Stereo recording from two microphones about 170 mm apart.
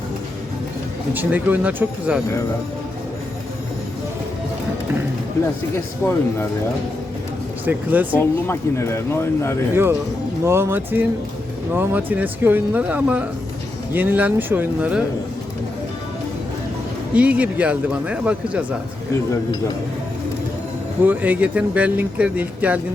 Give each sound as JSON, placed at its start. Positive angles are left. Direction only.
{"t": 1.1, "sound": "speech", "side_deg": -10}
{"t": 6.0, "sound": "speech", "side_deg": 15}
{"t": 7.6, "sound": "speech", "side_deg": -10}
{"t": 8.2, "sound": "speech", "side_deg": 15}
{"t": 10.4, "sound": "speech", "side_deg": -15}
{"t": 17.2, "sound": "speech", "side_deg": -10}
{"t": 19.3, "sound": "speech", "side_deg": 20}
{"t": 21.0, "sound": "speech", "side_deg": -10}